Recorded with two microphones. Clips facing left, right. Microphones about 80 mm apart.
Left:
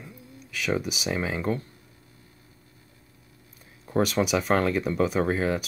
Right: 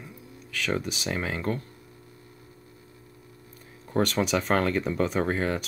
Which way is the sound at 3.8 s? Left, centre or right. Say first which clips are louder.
Left 1 dB; centre.